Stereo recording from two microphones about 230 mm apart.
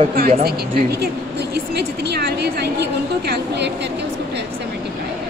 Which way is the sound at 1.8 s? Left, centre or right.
Right.